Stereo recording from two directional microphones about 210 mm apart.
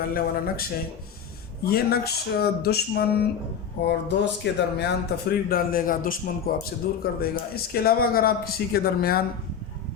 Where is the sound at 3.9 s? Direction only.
55° left (ahead or behind).